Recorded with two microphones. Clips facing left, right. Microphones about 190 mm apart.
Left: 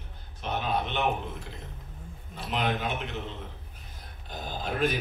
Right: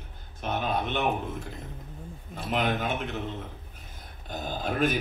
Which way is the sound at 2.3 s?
50° right (ahead or behind).